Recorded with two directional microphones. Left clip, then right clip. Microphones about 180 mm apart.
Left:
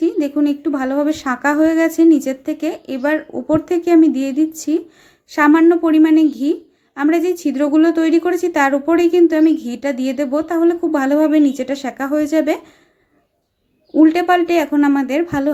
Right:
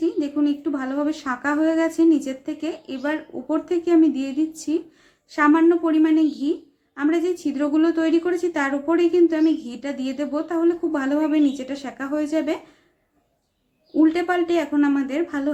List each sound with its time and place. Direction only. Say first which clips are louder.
0.0 s a woman's voice: left 6 dB; 35° left (ahead or behind)
13.9 s a woman's voice: left 7 dB; 40° left (ahead or behind)